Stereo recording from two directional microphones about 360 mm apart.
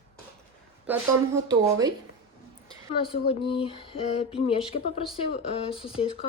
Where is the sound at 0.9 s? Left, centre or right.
Centre.